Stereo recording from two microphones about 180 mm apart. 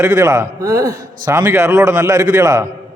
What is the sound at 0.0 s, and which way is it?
A man's voice, 15° right (ahead or behind).